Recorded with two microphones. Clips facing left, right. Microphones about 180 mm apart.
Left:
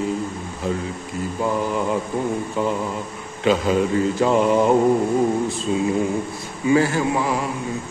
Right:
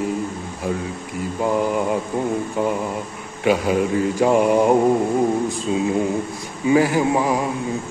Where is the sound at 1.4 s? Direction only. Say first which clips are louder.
Right 3 dB; 20° right (ahead or behind).